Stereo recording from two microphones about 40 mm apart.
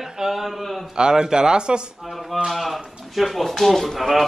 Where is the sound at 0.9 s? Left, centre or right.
Centre.